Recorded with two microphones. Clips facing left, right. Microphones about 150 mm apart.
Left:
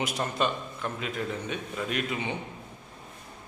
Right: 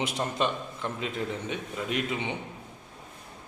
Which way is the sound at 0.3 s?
20° right (ahead or behind).